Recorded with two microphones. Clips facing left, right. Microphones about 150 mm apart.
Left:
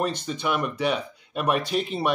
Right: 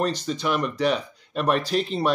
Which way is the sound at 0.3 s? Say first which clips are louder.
Right 2 dB; 5° left (ahead or behind).